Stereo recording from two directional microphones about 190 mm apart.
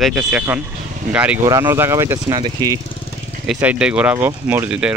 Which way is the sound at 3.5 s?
5° right (ahead or behind).